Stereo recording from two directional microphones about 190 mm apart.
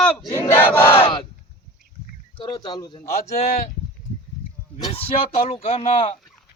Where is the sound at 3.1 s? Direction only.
35° left (ahead or behind).